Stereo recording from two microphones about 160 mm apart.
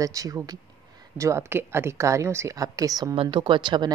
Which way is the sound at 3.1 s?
35° right (ahead or behind).